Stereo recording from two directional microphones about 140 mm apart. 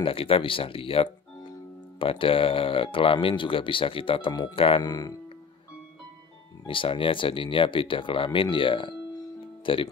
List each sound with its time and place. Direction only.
0.0 s speech: 40° left (ahead or behind)
6.6 s speech: 40° left (ahead or behind)